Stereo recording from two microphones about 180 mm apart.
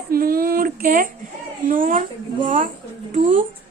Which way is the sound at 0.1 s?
55° right (ahead or behind).